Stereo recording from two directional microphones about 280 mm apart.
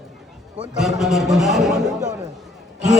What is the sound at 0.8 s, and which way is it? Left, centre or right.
A man's voice, centre.